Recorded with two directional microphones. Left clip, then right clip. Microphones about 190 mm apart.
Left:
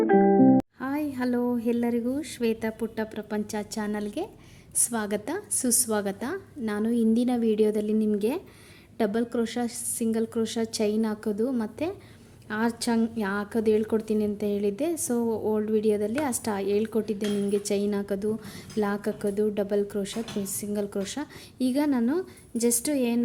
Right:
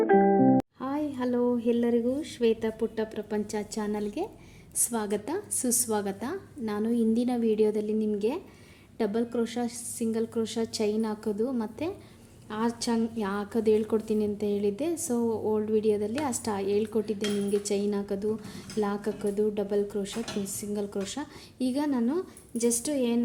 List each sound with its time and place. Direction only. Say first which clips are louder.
0.0 s music: left 2 dB; centre (ahead or behind)
0.8 s a woman's voice: left 1 dB; 30° left (ahead or behind)